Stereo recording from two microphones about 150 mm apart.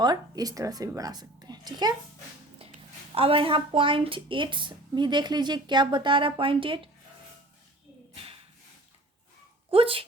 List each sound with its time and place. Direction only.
0.0 s a woman's voice: 25° right (ahead or behind)
3.2 s a woman's voice: 40° right (ahead or behind)
9.7 s a woman's voice: 40° right (ahead or behind)